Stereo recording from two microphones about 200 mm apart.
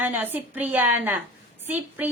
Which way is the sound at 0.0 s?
10° right (ahead or behind).